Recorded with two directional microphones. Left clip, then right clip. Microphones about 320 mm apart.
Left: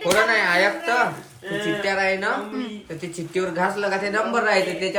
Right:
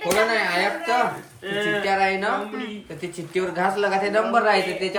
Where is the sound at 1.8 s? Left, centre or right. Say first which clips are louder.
Left 1 dB; centre.